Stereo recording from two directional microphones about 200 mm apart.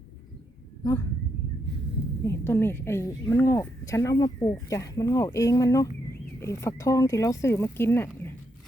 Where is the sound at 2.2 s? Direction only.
10° left (ahead or behind).